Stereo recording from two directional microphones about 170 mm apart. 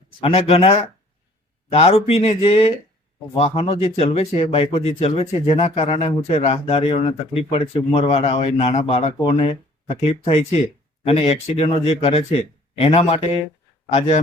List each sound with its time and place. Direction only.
0.2 s speech: 35° left (ahead or behind)